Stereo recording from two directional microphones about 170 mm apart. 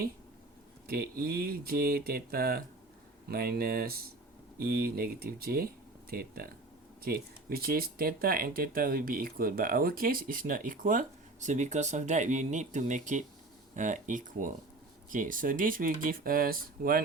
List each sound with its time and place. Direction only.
0.9 s speech: 65° right (ahead or behind)